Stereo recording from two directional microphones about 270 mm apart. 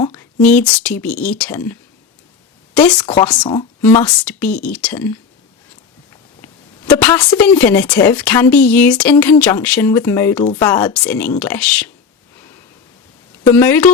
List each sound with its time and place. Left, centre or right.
0.1 s speech: centre
2.7 s speech: centre
3.4 s speech: centre
7.0 s speech: centre
13.5 s speech: centre